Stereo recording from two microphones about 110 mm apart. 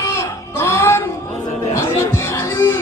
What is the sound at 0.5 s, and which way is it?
Music, 25° left (ahead or behind).